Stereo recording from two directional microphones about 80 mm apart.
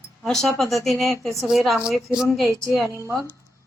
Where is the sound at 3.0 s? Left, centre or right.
Right.